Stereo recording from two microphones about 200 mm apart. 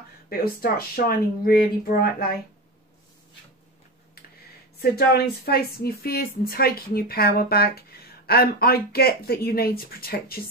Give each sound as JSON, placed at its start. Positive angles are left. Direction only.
{"t": 0.3, "sound": "a woman's voice", "side_deg": 50}
{"t": 4.7, "sound": "a woman's voice", "side_deg": 50}